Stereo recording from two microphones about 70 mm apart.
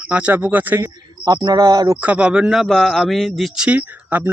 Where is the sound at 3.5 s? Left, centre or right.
Centre.